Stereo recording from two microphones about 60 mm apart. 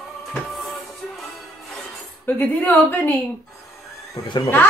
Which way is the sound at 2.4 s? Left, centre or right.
Left.